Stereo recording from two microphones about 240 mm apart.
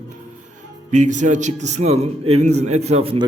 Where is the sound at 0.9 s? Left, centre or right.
Right.